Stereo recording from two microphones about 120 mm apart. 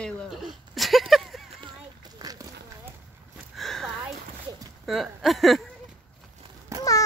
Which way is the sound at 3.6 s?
Centre (ahead or behind).